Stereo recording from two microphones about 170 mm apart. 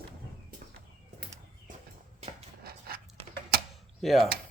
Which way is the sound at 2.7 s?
65° right (ahead or behind).